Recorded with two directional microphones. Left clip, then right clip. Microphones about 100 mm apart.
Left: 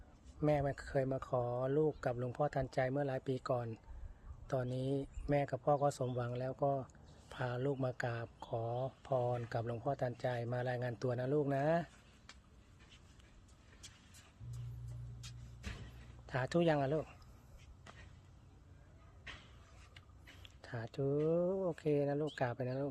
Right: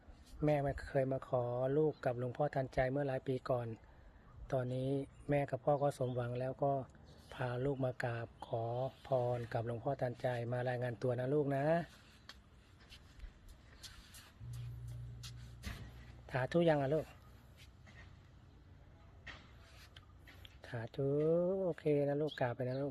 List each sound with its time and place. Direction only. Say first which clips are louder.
0.3 s a man's voice: even; 5° left (ahead or behind)
16.2 s a sound: right 1 dB; 15° left (ahead or behind)
16.7 s a man's voice: right 1 dB; 10° left (ahead or behind)
20.4 s a sound: even; 10° left (ahead or behind)
21.0 s a man's voice: right 1 dB; 10° left (ahead or behind)
21.7 s a man's voice: right 1 dB; 20° left (ahead or behind)